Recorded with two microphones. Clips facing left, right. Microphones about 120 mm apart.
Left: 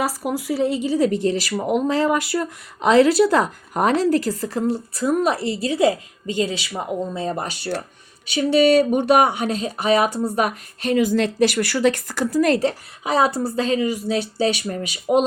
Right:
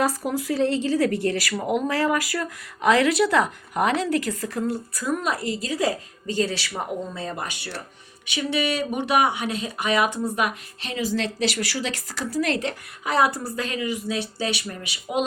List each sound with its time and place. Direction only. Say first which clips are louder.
0.0 s speech: even; 10° left (ahead or behind); by 7.4 s 25° left (ahead or behind)
8.3 s a woman's voice: left 10 dB; 40° left (ahead or behind)
13.1 s a woman's voice: left 3 dB; 25° left (ahead or behind); by 15.3 s 40° left (ahead or behind)